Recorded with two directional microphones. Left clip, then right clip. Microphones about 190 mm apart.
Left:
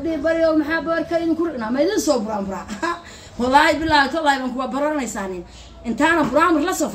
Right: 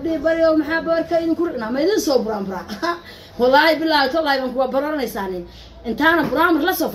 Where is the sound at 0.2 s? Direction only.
20° left (ahead or behind).